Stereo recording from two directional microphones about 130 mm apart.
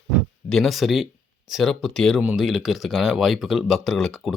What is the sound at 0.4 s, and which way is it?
Speech, centre (ahead or behind).